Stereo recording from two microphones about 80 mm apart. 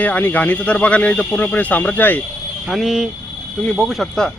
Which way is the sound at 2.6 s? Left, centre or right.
Centre.